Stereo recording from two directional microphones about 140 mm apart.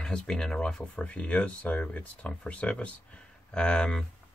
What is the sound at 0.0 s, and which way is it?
Speech, 5° left (ahead or behind).